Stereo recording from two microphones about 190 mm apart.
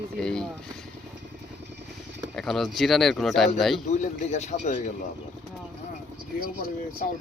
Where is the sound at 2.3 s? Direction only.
Centre (ahead or behind).